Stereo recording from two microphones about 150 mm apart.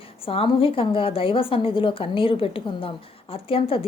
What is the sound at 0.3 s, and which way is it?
A woman's voice, 40° left (ahead or behind).